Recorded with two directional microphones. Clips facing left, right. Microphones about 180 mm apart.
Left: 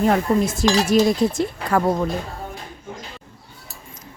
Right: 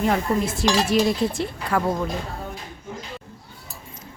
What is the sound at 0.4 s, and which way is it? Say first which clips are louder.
Dishes: left 3 dB; 45° left (ahead or behind).